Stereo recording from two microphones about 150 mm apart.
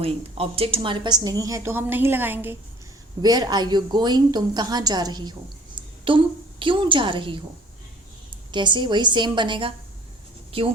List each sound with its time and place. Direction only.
0.0 s a woman's voice: 40° right (ahead or behind); by 2.6 s 15° right (ahead or behind)
3.2 s a woman's voice: 25° right (ahead or behind)
8.5 s a woman's voice: 30° right (ahead or behind)